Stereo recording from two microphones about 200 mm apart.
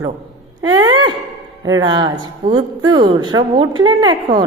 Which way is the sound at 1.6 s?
20° right (ahead or behind).